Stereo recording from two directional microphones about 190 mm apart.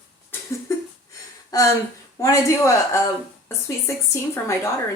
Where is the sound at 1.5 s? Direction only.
20° left (ahead or behind).